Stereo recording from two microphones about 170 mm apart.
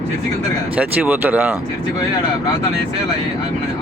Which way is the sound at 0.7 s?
10° right (ahead or behind).